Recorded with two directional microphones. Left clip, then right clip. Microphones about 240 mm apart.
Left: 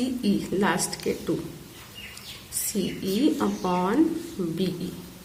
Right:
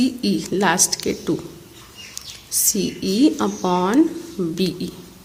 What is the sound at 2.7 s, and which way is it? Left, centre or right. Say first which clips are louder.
A woman's voice: right 5 dB; right.